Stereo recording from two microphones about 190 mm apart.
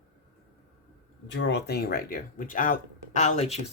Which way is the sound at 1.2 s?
70° left (ahead or behind).